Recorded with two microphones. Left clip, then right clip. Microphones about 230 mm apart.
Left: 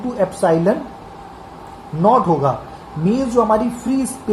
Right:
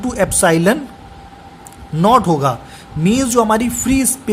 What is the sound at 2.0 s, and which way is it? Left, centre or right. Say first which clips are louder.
Speech: right 2 dB; right.